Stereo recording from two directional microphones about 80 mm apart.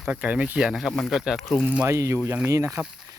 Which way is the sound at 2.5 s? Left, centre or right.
Right.